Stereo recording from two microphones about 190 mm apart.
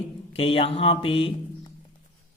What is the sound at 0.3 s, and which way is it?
Speech, 30° left (ahead or behind).